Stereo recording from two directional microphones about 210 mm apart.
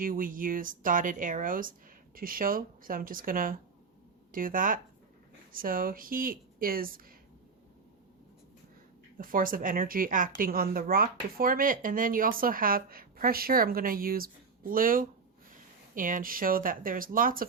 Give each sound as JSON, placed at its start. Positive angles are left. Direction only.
{"t": 0.0, "sound": "speech", "side_deg": -40}
{"t": 9.1, "sound": "speech", "side_deg": -40}